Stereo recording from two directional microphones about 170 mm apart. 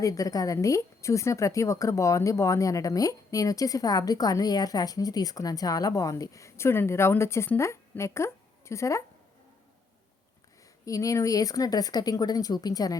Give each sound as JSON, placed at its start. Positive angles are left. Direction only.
{"t": 0.0, "sound": "a woman's voice", "side_deg": 20}
{"t": 10.8, "sound": "a woman's voice", "side_deg": 20}